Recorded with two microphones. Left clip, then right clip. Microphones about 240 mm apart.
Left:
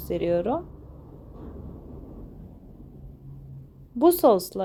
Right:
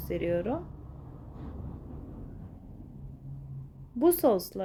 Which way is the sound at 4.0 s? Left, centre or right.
Centre.